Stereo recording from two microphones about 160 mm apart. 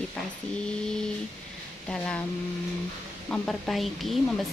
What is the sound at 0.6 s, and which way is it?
Speech, 5° left (ahead or behind).